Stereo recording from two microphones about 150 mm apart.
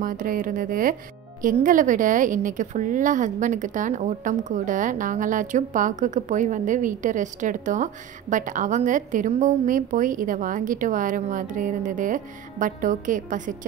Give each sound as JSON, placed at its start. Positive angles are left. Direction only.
{"t": 0.0, "sound": "a woman's voice", "side_deg": -65}